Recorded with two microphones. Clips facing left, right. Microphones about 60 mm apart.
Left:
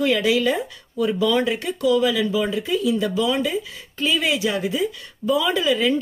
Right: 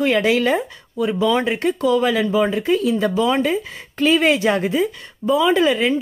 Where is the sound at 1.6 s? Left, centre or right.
Right.